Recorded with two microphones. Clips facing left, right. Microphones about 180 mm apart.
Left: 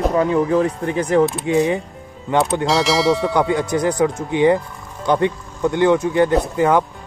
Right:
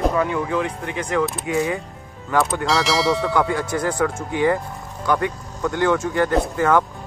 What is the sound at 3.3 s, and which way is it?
Speech, 20° left (ahead or behind).